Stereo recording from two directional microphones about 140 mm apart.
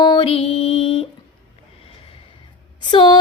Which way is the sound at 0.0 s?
35° left (ahead or behind).